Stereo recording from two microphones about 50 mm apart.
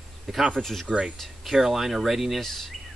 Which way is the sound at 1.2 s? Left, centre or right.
Centre.